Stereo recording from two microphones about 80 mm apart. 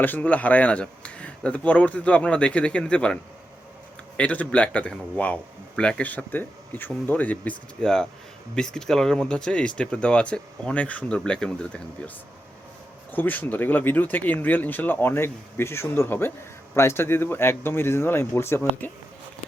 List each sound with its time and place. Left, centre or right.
0.0 s a man's voice: left
4.2 s a man's voice: centre
7.8 s a man's voice: centre
13.1 s speech: left